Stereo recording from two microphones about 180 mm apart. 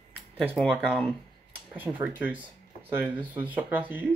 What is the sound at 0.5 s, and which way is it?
Speech, 5° left (ahead or behind).